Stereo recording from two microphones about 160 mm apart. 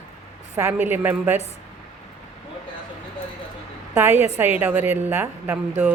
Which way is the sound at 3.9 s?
15° right (ahead or behind).